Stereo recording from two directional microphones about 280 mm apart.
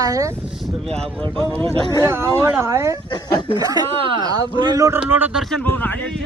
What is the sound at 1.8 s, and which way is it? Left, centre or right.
Speech, centre.